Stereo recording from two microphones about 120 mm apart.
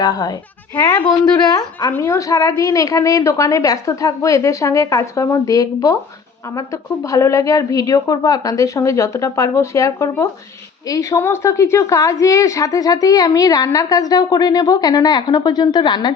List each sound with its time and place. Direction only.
0.0 s a woman's voice: 35° left (ahead or behind)